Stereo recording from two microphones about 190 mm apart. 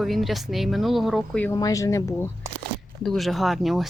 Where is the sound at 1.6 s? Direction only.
15° left (ahead or behind).